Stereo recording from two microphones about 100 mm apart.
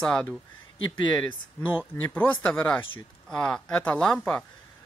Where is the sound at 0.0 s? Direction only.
5° left (ahead or behind).